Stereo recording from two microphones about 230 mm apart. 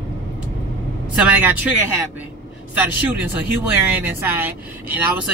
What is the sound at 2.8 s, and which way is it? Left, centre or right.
Speech, centre.